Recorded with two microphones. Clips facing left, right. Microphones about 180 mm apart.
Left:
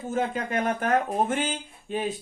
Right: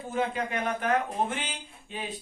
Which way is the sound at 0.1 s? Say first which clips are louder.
Left 2 dB; 45° left (ahead or behind).